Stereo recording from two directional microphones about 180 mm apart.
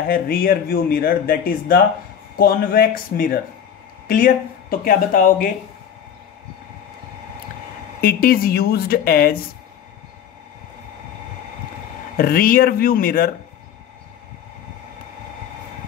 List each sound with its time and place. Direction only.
0.1 s speech: 55° left (ahead or behind)
8.0 s speech: 55° left (ahead or behind)
12.2 s speech: 55° left (ahead or behind)